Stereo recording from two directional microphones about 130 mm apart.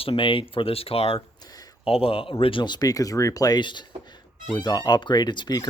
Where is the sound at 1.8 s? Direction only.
45° left (ahead or behind).